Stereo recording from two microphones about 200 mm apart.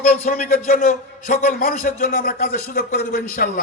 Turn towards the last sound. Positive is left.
turn(degrees=45)  # may be behind; listen again after turning